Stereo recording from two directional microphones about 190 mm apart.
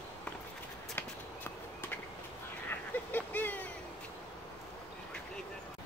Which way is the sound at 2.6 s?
10° left (ahead or behind).